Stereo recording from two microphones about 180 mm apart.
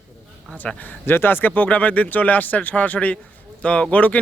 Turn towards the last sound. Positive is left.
turn(degrees=10)  # may be behind; listen again after turning